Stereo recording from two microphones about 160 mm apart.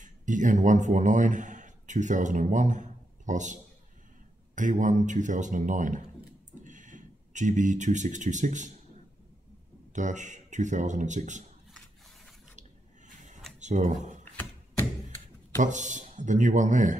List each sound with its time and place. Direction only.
0.0 s speech: 50° right (ahead or behind)
4.6 s speech: 50° right (ahead or behind)
9.9 s speech: 50° right (ahead or behind)
12.5 s squish: 50° right (ahead or behind)
13.6 s speech: 50° right (ahead or behind)
15.6 s speech: 50° right (ahead or behind)